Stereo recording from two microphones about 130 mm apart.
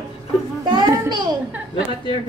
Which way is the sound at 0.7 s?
35° right (ahead or behind).